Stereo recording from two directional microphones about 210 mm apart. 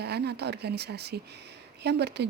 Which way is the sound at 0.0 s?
50° right (ahead or behind).